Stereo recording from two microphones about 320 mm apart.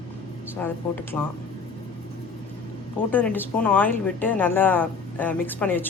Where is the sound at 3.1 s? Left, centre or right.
Centre.